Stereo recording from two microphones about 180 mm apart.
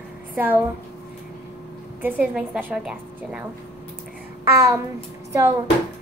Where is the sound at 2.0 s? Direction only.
10° right (ahead or behind).